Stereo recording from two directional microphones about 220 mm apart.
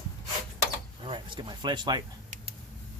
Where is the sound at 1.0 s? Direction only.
20° right (ahead or behind).